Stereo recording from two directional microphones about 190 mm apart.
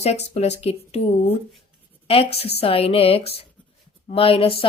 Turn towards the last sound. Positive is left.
turn(degrees=30)  # may be behind; listen again after turning